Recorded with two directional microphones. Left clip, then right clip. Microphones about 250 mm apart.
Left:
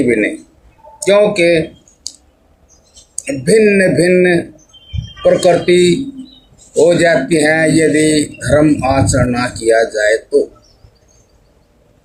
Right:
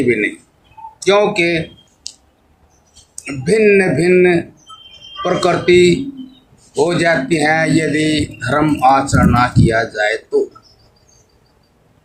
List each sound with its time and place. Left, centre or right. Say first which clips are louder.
1.0 s speech: left 3 dB; right
3.2 s speech: left 4 dB; right